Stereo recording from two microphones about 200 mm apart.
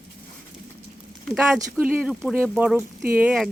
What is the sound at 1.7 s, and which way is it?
Speech, 10° right (ahead or behind).